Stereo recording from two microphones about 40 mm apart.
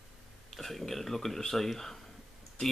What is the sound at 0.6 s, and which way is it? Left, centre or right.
Speech, centre.